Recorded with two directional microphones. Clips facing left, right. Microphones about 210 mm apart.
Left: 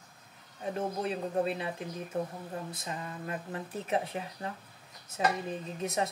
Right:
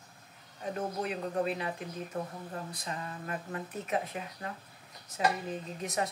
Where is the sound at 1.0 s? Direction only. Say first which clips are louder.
Left 1 dB; 30° left (ahead or behind).